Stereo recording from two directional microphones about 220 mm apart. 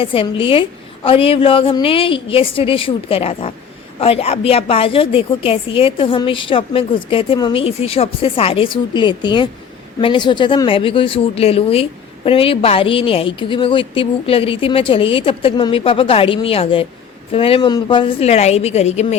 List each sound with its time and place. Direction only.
0.0 s speech: 25° left (ahead or behind)